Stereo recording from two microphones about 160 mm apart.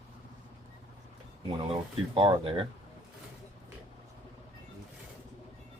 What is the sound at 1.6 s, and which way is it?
Speech, 30° right (ahead or behind).